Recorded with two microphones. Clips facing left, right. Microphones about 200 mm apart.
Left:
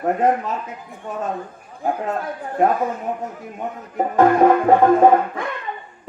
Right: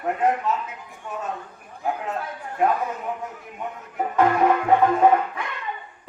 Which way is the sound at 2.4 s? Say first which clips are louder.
Left 4 dB; 35° left (ahead or behind).